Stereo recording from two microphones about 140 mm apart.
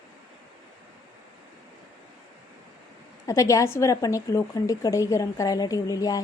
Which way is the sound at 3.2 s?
25° left (ahead or behind).